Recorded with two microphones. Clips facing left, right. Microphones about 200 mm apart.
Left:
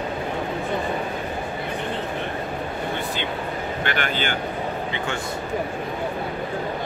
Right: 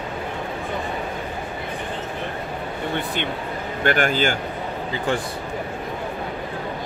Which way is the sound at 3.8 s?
45° right (ahead or behind).